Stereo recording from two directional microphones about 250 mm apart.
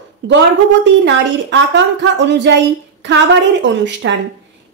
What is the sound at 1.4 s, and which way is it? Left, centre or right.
A woman's voice, right.